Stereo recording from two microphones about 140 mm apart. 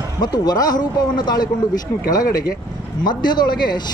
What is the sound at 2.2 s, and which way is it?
Speech, 90° left.